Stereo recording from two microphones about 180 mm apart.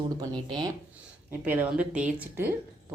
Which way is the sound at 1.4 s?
10° right (ahead or behind).